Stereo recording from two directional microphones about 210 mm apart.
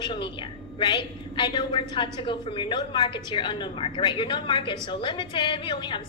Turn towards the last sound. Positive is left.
turn(degrees=20)  # may be behind; listen again after turning